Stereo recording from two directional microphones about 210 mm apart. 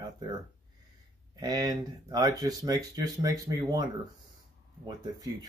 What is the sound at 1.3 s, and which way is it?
Speech, 20° right (ahead or behind).